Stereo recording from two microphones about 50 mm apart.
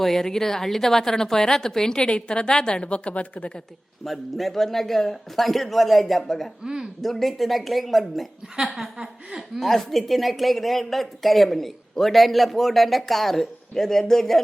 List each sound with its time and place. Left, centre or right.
0.0 s a woman's voice: centre; by 3.6 s left
4.0 s a man's voice: centre
6.7 s a woman's voice: centre
7.0 s a man's voice: centre
9.6 s a man's voice: centre